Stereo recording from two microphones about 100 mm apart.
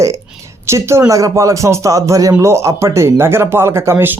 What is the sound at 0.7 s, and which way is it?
A man's voice, 25° right (ahead or behind).